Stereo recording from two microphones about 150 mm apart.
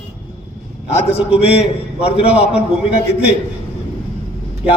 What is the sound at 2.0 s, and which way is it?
Speech, 40° left (ahead or behind).